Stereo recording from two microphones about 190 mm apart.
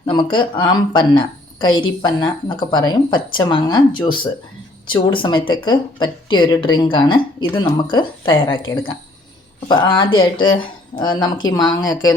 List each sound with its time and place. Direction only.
0.0 s speech: 25° left (ahead or behind)
9.6 s speech: 20° left (ahead or behind)